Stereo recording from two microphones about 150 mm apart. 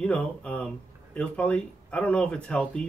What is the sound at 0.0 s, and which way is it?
Speech, 5° left (ahead or behind).